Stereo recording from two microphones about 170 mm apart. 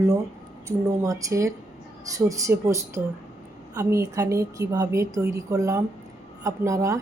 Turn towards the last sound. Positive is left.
turn(degrees=-20)  # may be behind; listen again after turning